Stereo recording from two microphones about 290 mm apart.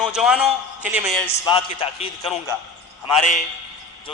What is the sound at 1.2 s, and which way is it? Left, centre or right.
A man's voice, centre.